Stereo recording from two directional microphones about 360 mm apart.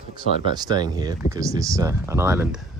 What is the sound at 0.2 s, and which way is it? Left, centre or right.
Speech, centre.